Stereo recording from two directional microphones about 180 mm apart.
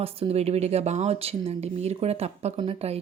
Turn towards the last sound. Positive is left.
turn(degrees=-35)  # may be behind; listen again after turning